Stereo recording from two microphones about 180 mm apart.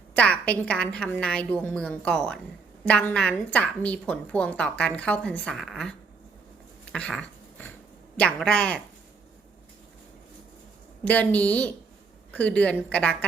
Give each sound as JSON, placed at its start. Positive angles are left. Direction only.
{"t": 0.1, "sound": "a woman's voice", "side_deg": 5}
{"t": 6.9, "sound": "a sound", "side_deg": 5}
{"t": 8.1, "sound": "a woman's voice", "side_deg": 5}
{"t": 11.0, "sound": "a woman's voice", "side_deg": 10}